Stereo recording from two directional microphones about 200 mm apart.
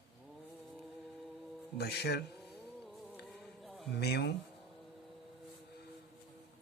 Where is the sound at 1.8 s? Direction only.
55° left (ahead or behind).